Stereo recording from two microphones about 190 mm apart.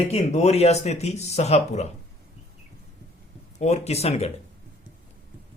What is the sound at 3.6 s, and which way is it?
Speech, 35° left (ahead or behind).